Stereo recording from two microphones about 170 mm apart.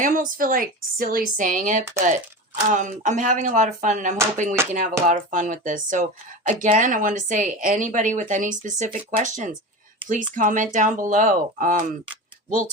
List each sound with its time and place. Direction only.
0.0 s speech: 55° right (ahead or behind)